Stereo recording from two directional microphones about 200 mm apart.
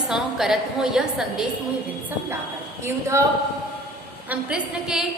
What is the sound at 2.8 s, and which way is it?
Speech, 15° right (ahead or behind).